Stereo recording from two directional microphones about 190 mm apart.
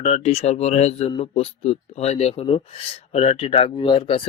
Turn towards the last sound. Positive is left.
turn(degrees=25)  # may be behind; listen again after turning